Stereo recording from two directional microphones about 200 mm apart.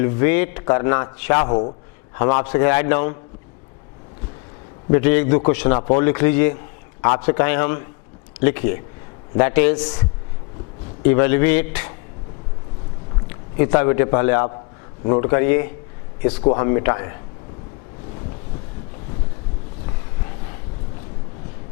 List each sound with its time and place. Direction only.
0.0 s a man's voice: 15° left (ahead or behind)
4.9 s a man's voice: 15° left (ahead or behind)
9.8 s a man's voice: 25° left (ahead or behind)
13.6 s a man's voice: 15° left (ahead or behind)